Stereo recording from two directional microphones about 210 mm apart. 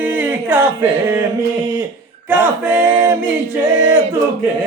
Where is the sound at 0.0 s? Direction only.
10° right (ahead or behind).